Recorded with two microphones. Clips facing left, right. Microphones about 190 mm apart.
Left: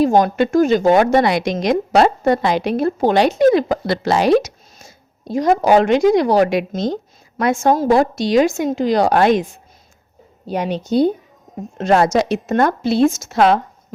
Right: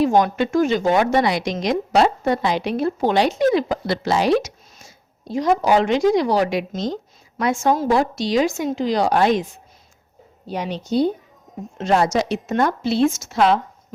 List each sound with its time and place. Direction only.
0.0 s speech: 40° left (ahead or behind)